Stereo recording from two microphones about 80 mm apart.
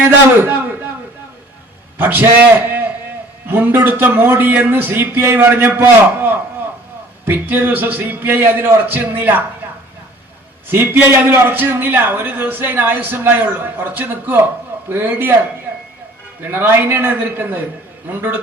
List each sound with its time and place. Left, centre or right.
0.4 s a sound: right
2.0 s a man's voice: right
10.7 s a man's voice: right
16.4 s a man's voice: right